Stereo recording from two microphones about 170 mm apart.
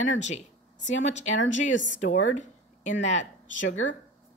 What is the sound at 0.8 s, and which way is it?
Speech, 90° left.